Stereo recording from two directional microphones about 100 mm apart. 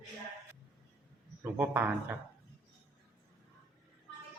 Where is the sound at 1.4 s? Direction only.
20° right (ahead or behind).